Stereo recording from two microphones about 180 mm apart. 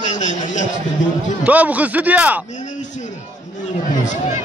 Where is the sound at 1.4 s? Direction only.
10° right (ahead or behind).